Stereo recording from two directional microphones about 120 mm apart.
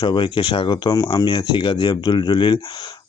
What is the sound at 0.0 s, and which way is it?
Speech, 40° left (ahead or behind).